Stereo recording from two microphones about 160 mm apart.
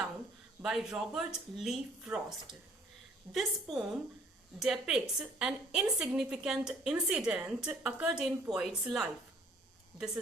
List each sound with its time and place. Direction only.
0.6 s a woman's voice: 5° right (ahead or behind)